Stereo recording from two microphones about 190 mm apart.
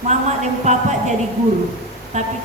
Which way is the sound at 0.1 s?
35° right (ahead or behind).